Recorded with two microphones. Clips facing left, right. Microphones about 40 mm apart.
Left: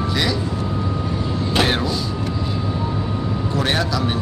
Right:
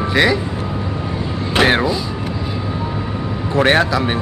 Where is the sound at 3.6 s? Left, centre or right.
Right.